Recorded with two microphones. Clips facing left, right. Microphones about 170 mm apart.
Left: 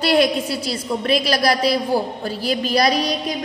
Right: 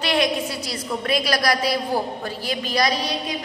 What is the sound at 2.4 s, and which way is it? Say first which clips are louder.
Speech: left 5 dB; 35° left (ahead or behind).